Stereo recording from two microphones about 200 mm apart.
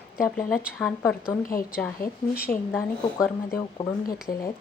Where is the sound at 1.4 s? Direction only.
45° left (ahead or behind).